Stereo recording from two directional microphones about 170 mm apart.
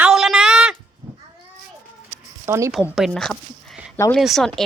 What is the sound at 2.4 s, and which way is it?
Speech, 15° right (ahead or behind).